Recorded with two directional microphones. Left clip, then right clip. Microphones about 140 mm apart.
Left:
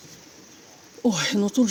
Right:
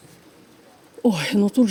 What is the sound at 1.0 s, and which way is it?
Speech, 45° right (ahead or behind).